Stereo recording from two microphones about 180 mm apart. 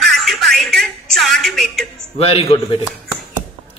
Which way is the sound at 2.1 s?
35° left (ahead or behind).